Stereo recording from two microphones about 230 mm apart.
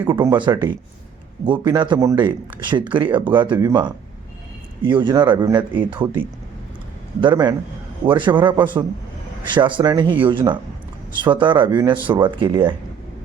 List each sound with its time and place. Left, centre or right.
0.0 s speech: centre